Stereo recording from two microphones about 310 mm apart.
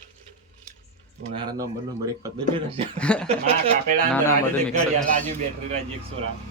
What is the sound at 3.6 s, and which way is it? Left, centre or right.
Speech, right.